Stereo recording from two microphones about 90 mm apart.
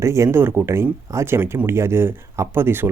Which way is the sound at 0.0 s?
35° right (ahead or behind).